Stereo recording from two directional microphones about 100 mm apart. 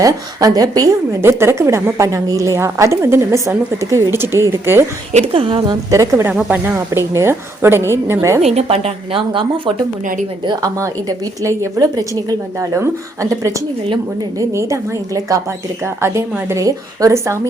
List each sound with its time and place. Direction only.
0.0 s a woman's voice: 40° right (ahead or behind)
1.2 s a woman's voice: 25° right (ahead or behind)
5.2 s a woman's voice: 65° right (ahead or behind)
5.9 s a woman's voice: 30° right (ahead or behind)
8.4 s a woman's voice: 85° right; by 9.7 s 60° right (ahead or behind)
10.4 s a woman's voice: 45° right (ahead or behind)
11.4 s a woman's voice: 35° right (ahead or behind)
14.3 s a woman's voice: 30° right (ahead or behind)